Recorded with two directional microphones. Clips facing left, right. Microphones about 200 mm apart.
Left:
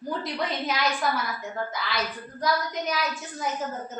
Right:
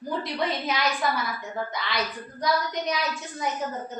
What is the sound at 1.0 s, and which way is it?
A woman's voice, centre (ahead or behind).